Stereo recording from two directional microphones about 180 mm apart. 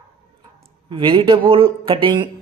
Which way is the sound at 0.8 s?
30° right (ahead or behind).